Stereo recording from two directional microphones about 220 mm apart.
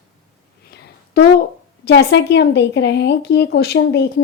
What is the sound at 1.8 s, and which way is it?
Speech, 50° left (ahead or behind).